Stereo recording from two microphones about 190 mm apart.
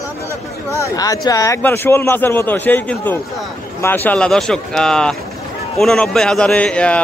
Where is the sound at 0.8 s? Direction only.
20° left (ahead or behind).